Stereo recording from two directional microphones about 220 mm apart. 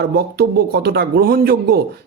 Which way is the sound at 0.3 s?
45° right (ahead or behind).